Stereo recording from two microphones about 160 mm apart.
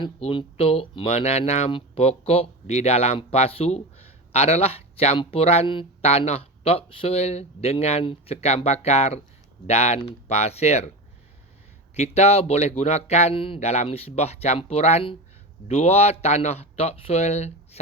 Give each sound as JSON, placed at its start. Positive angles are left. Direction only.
{"t": 0.0, "sound": "speech", "side_deg": 35}
{"t": 11.9, "sound": "speech", "side_deg": 40}